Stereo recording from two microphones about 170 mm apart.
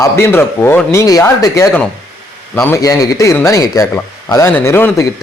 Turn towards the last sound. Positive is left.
turn(degrees=15)  # may be behind; listen again after turning